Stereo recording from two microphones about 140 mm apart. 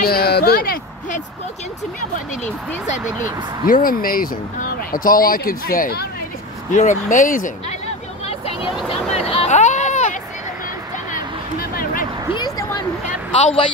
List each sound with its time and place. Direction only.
0.0 s speech: 90° left
3.6 s speech: 90° left
6.7 s speech: 65° left (ahead or behind)
8.3 s vehicle: 45° left (ahead or behind)
11.7 s a sound: 80° left
12.4 s a sound: 25° left (ahead or behind)